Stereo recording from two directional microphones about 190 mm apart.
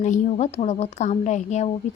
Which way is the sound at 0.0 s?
40° left (ahead or behind).